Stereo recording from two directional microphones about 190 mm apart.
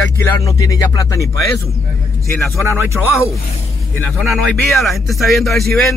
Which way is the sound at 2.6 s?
15° right (ahead or behind).